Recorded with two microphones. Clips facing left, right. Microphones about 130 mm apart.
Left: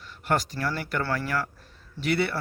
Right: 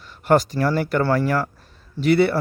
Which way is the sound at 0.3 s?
35° right (ahead or behind).